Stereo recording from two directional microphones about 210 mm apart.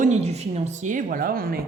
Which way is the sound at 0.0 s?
35° right (ahead or behind).